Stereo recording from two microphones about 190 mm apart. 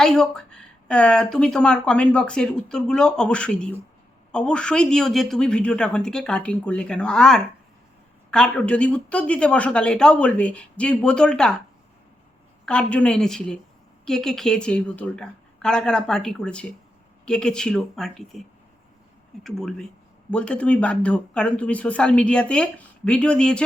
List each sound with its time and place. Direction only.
0.0 s speech: 5° left (ahead or behind)
12.6 s speech: 5° left (ahead or behind)